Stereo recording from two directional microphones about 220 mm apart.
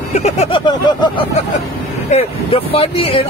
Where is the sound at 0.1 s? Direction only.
30° left (ahead or behind).